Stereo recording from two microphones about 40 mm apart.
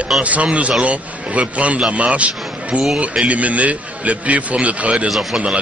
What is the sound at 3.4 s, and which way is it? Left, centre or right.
A man's voice, right.